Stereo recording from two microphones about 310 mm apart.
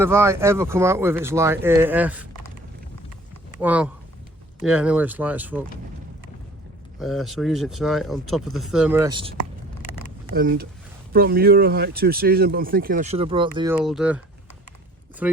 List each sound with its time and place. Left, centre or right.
0.0 s speech: centre
3.6 s speech: centre
7.0 s speech: centre
10.3 s speech: right; by 14.2 s centre
15.2 s speech: centre